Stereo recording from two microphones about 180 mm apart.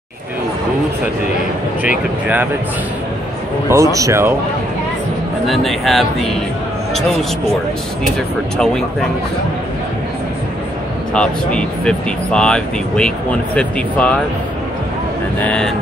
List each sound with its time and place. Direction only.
3.6 s speech: 15° right (ahead or behind)
5.5 s a man's voice: centre (ahead or behind)
11.1 s speech: 5° left (ahead or behind)
15.4 s speech: 5° left (ahead or behind)